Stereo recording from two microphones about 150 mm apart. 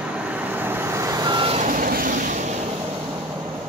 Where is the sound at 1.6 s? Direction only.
60° right (ahead or behind).